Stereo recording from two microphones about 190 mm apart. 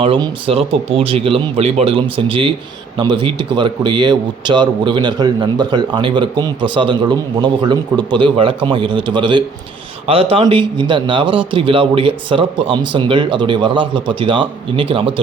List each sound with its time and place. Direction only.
0.0 s a man's voice: 30° right (ahead or behind)